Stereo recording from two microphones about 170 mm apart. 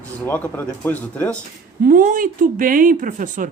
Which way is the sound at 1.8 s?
55° right (ahead or behind).